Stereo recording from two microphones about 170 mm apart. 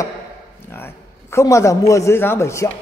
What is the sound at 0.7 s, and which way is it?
A man's voice, 15° left (ahead or behind).